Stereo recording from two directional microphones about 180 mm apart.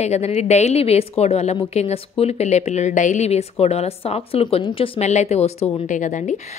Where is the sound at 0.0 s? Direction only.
40° left (ahead or behind).